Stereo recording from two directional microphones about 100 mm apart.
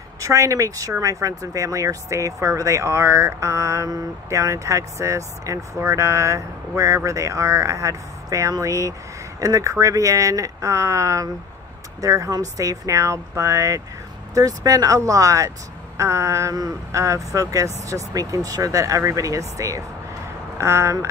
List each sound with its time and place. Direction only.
0.2 s speech: 30° right (ahead or behind)